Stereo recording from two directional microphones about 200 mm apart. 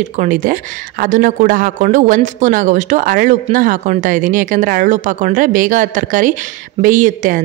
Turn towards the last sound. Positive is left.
turn(degrees=-40)  # may be behind; listen again after turning